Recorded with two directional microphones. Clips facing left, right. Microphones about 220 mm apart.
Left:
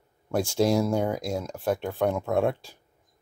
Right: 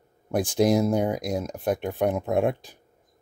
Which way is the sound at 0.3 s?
15° right (ahead or behind).